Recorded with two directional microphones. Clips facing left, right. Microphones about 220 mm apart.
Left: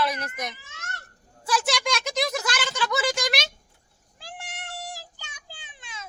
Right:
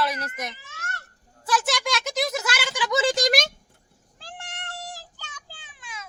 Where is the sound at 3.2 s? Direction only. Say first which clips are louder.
Right 6 dB; 50° right (ahead or behind).